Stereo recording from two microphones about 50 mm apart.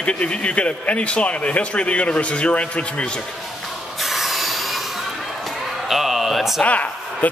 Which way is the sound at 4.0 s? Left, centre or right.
Centre.